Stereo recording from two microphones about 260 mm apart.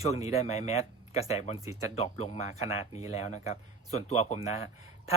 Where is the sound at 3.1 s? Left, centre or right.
Left.